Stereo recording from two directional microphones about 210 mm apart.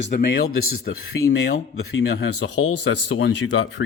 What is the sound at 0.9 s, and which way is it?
Speech, 60° left (ahead or behind).